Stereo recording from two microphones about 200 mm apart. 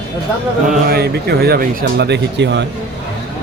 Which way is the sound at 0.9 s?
50° right (ahead or behind).